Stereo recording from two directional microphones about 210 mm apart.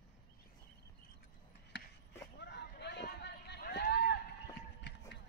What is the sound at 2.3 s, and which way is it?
Run, 55° left (ahead or behind).